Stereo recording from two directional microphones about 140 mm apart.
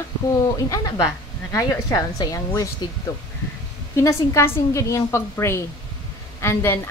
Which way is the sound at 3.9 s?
20° left (ahead or behind).